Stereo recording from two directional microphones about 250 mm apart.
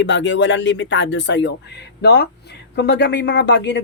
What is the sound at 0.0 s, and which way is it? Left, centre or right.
Speech, left.